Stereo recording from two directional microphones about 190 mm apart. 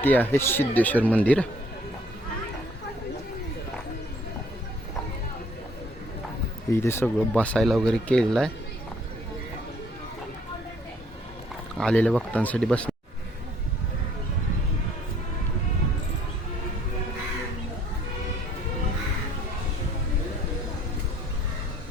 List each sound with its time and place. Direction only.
0.0 s speech: 10° left (ahead or behind)
6.7 s speech: 10° left (ahead or behind)
11.8 s speech: 5° left (ahead or behind)